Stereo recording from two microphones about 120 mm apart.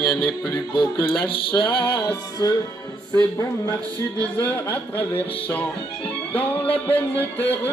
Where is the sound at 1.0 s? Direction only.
45° left (ahead or behind).